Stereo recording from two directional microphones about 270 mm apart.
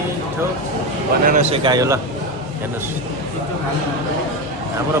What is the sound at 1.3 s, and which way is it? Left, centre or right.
Speech, right.